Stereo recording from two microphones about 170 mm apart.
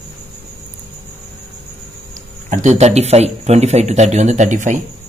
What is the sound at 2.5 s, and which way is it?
Speech, 45° right (ahead or behind).